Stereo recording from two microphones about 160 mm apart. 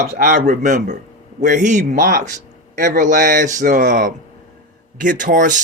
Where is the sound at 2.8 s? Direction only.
55° right (ahead or behind).